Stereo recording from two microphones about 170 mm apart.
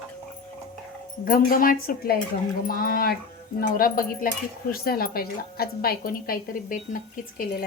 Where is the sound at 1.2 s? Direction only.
55° left (ahead or behind).